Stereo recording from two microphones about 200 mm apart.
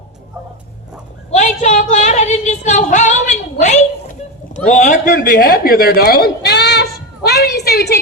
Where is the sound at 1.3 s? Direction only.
35° left (ahead or behind).